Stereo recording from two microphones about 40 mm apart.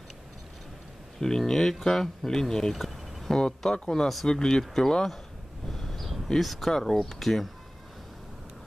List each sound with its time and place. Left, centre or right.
1.2 s speech: centre
2.7 s a sound: centre
3.3 s speech: centre
5.7 s a sound: centre
6.4 s speech: centre
6.7 s speech: centre